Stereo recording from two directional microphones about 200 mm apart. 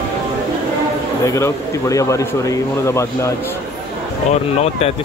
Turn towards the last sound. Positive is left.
turn(degrees=30)  # may be behind; listen again after turning